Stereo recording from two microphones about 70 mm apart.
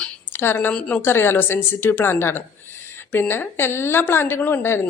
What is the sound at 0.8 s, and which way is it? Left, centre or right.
Speech, centre.